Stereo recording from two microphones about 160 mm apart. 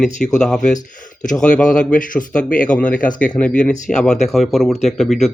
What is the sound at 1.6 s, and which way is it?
Speech, 5° left (ahead or behind).